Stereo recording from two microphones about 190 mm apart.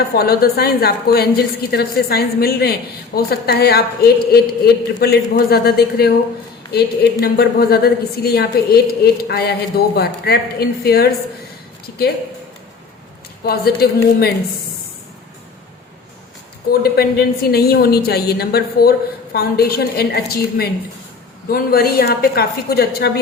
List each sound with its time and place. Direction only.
0.2 s a woman's voice: 55° left (ahead or behind)
13.4 s a woman's voice: 55° left (ahead or behind)
16.8 s a woman's voice: 55° left (ahead or behind)